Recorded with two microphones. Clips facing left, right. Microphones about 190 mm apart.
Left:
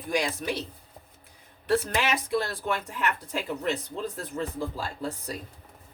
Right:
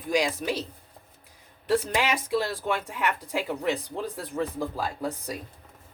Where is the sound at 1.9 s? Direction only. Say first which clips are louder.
Right 1 dB; 10° right (ahead or behind).